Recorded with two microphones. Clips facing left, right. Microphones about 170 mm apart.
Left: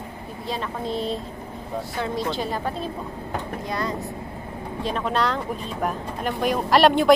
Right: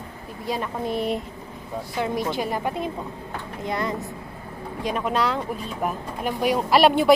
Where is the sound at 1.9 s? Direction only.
15° right (ahead or behind).